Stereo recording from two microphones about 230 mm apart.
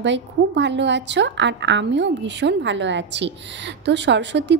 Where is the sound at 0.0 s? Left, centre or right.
Right.